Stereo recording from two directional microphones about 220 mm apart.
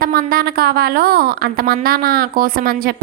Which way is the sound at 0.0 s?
40° right (ahead or behind).